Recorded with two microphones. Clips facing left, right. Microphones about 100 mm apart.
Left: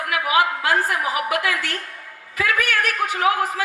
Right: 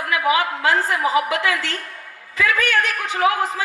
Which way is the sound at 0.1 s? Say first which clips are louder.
Even; 25° right (ahead or behind).